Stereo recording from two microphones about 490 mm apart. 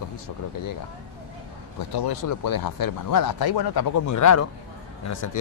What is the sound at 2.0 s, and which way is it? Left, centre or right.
Speech, left.